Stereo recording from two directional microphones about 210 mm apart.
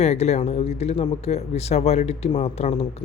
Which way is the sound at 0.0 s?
30° left (ahead or behind).